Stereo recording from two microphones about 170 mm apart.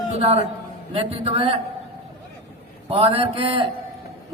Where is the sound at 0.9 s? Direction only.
35° right (ahead or behind).